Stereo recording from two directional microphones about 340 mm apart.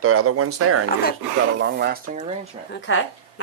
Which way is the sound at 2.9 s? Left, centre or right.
Left.